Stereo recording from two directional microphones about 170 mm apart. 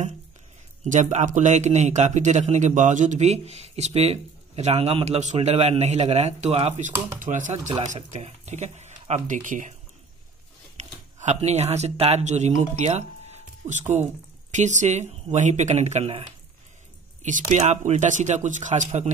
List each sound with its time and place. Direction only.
0.8 s a man's voice: 45° right (ahead or behind)
10.8 s a man's voice: 45° right (ahead or behind)